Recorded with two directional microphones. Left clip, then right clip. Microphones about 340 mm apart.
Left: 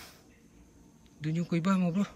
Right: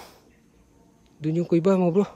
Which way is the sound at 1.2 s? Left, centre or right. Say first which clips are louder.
Right 11 dB; centre.